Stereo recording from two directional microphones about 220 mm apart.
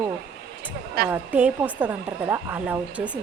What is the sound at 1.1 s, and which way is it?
Speech, 10° right (ahead or behind).